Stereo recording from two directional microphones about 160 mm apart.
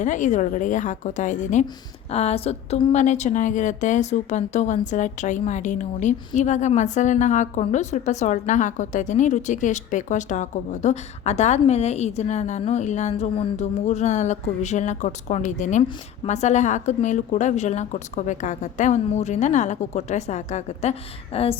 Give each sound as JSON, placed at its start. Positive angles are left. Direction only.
{"t": 0.0, "sound": "a woman's voice", "side_deg": 50}